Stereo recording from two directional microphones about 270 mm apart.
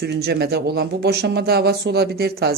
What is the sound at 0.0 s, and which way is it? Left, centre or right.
Speech, right.